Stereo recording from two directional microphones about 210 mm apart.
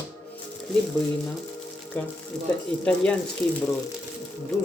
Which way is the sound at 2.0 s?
10° left (ahead or behind).